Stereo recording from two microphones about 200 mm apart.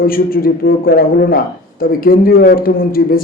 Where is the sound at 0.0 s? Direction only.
45° left (ahead or behind).